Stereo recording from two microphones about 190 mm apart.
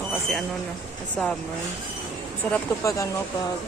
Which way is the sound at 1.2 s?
5° left (ahead or behind).